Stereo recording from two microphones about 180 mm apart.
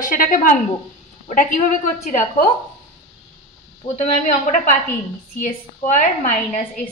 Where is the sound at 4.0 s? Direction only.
45° left (ahead or behind).